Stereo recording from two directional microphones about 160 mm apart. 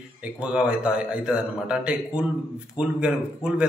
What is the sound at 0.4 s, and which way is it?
A man's voice, 5° right (ahead or behind).